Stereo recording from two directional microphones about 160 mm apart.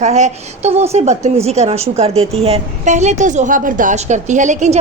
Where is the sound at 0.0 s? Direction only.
45° right (ahead or behind).